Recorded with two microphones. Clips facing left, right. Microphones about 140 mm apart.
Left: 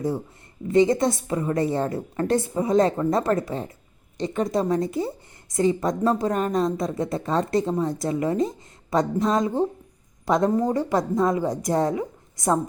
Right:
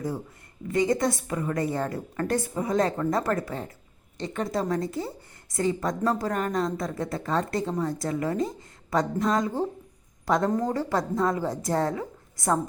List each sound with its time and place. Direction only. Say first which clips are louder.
0.7 s a woman's voice: left 5 dB; 25° left (ahead or behind)